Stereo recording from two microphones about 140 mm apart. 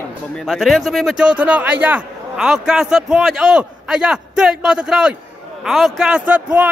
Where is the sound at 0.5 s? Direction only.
Centre (ahead or behind).